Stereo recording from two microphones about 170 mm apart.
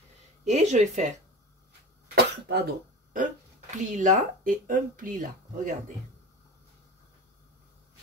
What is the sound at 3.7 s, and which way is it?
Speech, 45° right (ahead or behind).